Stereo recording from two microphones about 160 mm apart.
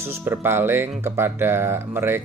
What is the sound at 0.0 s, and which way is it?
Speech, 15° right (ahead or behind).